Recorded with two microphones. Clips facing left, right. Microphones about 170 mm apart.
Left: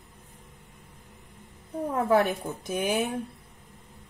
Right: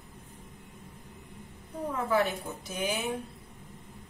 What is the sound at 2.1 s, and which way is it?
A woman's voice, 55° left (ahead or behind).